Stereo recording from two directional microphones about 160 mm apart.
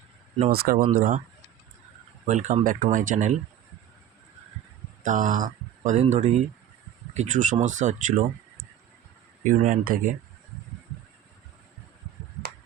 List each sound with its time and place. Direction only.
0.5 s speech: 70° right (ahead or behind)
2.2 s speech: 50° right (ahead or behind)
5.0 s speech: 55° right (ahead or behind)